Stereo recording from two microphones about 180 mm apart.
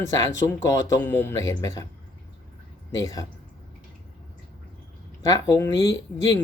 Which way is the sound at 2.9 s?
20° left (ahead or behind).